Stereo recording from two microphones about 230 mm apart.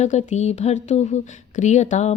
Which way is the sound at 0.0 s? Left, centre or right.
Left.